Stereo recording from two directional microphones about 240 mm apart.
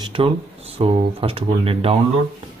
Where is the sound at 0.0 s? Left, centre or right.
Right.